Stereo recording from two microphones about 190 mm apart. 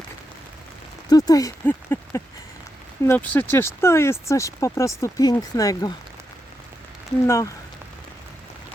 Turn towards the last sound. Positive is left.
turn(degrees=15)  # may be behind; listen again after turning